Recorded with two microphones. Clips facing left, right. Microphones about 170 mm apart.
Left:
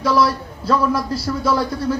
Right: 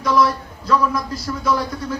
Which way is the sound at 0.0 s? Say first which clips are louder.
Left 1 dB; 30° left (ahead or behind).